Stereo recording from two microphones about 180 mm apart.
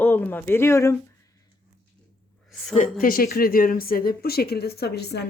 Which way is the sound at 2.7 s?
45° left (ahead or behind).